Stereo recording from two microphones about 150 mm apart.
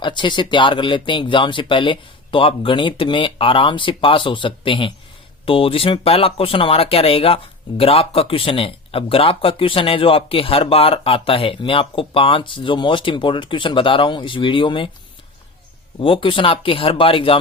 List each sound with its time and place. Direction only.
0.0 s speech: 30° left (ahead or behind)
16.0 s speech: 35° left (ahead or behind)